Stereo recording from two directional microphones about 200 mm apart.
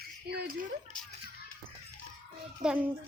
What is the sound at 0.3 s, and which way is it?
Speech, 55° right (ahead or behind).